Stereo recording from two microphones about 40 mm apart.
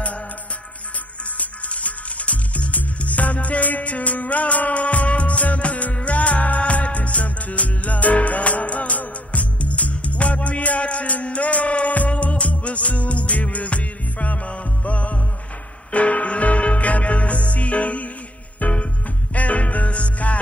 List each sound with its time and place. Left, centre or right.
1.4 s music: left